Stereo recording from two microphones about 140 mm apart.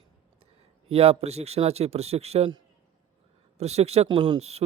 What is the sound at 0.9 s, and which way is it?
A man's voice, 45° right (ahead or behind).